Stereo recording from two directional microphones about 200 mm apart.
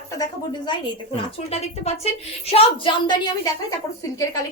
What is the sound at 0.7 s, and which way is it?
A woman's voice, 30° left (ahead or behind).